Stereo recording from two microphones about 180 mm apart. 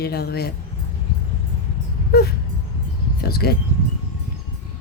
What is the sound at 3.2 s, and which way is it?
Speech, 60° left (ahead or behind).